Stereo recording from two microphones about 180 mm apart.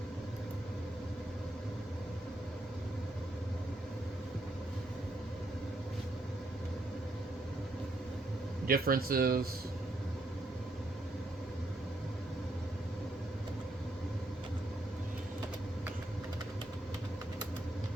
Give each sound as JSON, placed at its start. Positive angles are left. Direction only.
{"t": 8.6, "sound": "speech", "side_deg": -55}